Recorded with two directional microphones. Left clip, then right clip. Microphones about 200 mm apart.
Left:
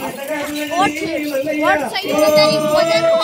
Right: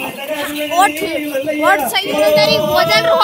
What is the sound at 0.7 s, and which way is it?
A woman's voice, 15° right (ahead or behind).